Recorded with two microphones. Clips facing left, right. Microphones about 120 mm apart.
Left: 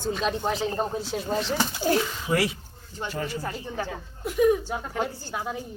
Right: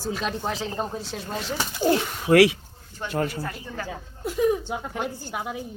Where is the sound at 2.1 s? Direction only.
65° right (ahead or behind).